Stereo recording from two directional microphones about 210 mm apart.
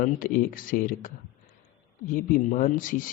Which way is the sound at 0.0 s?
40° left (ahead or behind).